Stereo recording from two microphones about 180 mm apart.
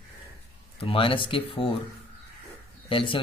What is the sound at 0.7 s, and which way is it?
Speech, 30° left (ahead or behind).